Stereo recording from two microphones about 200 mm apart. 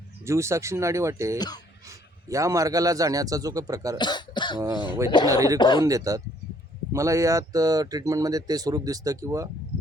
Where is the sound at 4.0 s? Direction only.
20° left (ahead or behind).